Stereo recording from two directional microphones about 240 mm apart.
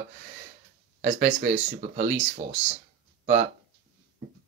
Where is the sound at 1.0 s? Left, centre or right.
Right.